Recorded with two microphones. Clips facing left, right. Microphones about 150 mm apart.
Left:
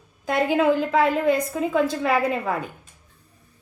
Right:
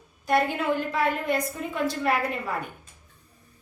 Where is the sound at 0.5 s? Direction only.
90° left.